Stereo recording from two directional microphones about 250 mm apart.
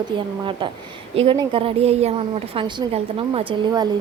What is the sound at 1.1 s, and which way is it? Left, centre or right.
A woman's voice, centre.